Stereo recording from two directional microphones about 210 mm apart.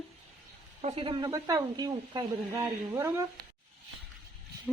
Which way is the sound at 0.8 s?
30° right (ahead or behind).